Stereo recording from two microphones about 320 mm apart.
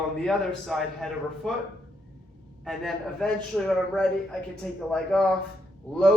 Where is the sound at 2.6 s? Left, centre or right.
Centre.